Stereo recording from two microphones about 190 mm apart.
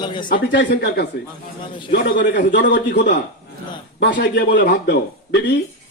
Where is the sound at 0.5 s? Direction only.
60° left (ahead or behind).